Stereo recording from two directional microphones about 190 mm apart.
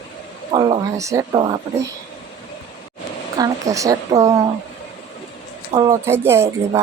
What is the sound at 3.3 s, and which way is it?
A woman's voice, 20° right (ahead or behind).